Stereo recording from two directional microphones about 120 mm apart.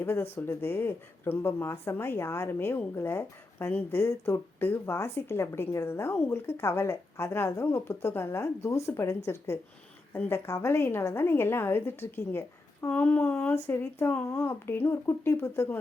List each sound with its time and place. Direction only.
0.0 s speech: 20° left (ahead or behind)